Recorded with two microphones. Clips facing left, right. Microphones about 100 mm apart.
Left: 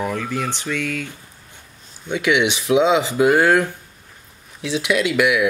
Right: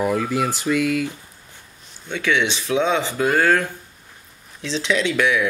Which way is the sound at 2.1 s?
15° left (ahead or behind).